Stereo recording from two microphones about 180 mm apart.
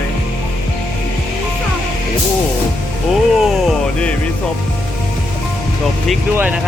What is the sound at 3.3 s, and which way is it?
Speech, centre (ahead or behind).